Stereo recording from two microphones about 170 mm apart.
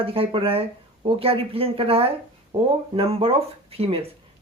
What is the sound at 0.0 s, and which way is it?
Speech, 30° right (ahead or behind).